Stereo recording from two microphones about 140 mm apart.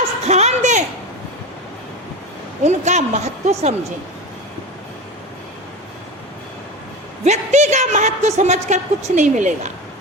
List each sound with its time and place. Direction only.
0.3 s a sound: 55° right (ahead or behind)
2.6 s speech: 55° right (ahead or behind)
7.3 s a woman's voice: 55° right (ahead or behind)